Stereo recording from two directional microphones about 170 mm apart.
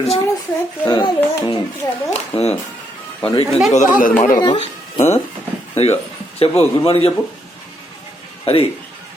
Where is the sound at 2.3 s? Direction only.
40° left (ahead or behind).